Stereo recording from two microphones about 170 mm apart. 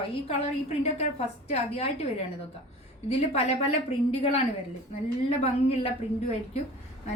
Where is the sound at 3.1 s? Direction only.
35° left (ahead or behind).